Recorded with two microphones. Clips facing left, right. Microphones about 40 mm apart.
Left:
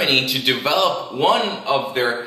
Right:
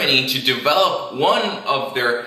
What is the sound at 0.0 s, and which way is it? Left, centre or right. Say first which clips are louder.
A man's voice: even; centre.